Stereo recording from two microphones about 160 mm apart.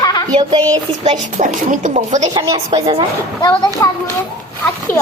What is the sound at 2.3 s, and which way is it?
Speech, 25° right (ahead or behind).